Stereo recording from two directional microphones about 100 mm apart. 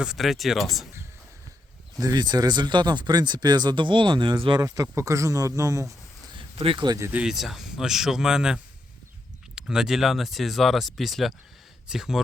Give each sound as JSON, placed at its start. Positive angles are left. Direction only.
{"t": 0.0, "sound": "speech", "side_deg": -5}
{"t": 2.0, "sound": "speech", "side_deg": -40}
{"t": 4.6, "sound": "speech", "side_deg": -35}
{"t": 6.6, "sound": "speech", "side_deg": -65}
{"t": 7.1, "sound": "speech", "side_deg": -10}
{"t": 9.6, "sound": "speech", "side_deg": -5}